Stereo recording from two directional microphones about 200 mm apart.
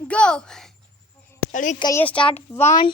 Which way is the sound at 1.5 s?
40° left (ahead or behind).